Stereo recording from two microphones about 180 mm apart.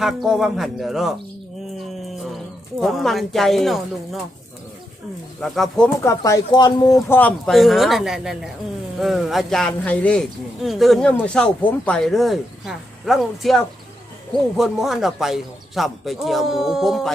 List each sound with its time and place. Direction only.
0.0 s speech: centre (ahead or behind)
1.9 s a sound: centre (ahead or behind)
2.8 s speech: centre (ahead or behind)
5.4 s speech: centre (ahead or behind)
6.0 s speech: 15° left (ahead or behind)
7.2 s speech: 5° left (ahead or behind)